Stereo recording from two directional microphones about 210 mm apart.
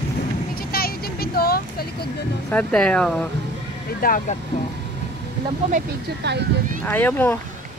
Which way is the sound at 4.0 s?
40° left (ahead or behind).